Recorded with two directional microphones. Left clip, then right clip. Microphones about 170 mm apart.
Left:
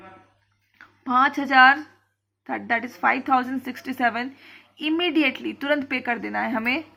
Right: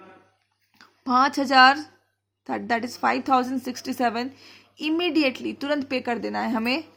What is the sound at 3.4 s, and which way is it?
Speech, 25° right (ahead or behind).